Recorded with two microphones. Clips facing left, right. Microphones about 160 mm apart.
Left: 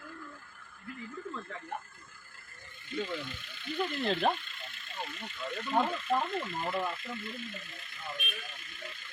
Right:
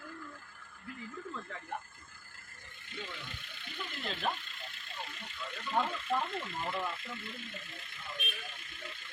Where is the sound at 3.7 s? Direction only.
55° left (ahead or behind).